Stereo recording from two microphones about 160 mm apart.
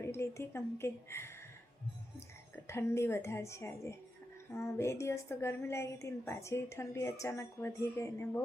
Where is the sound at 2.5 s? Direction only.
15° left (ahead or behind).